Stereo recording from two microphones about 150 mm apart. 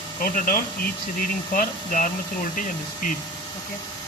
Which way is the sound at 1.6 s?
60° left (ahead or behind).